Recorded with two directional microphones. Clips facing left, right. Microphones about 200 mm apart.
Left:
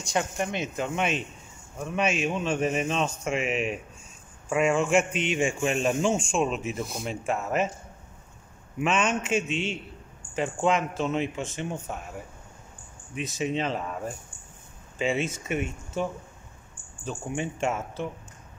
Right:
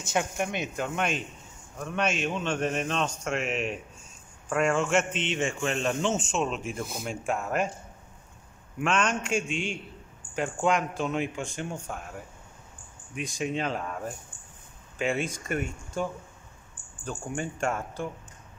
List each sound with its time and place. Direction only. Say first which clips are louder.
0.0 s a man's voice: left 1 dB; 5° right (ahead or behind)
8.7 s a man's voice: left 1 dB; 5° left (ahead or behind)
13.1 s a man's voice: left 2 dB; centre (ahead or behind)
15.2 s a man's voice: left 1 dB; 5° left (ahead or behind)
17.0 s a man's voice: left 2 dB; 5° left (ahead or behind)